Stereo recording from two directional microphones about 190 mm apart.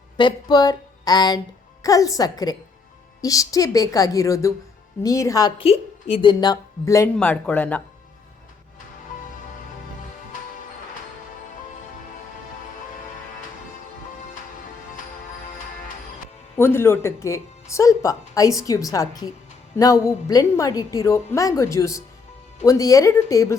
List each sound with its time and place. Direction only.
0.2 s a woman's voice: 25° left (ahead or behind)
7.2 s speech: 5° left (ahead or behind)
16.6 s speech: 10° left (ahead or behind)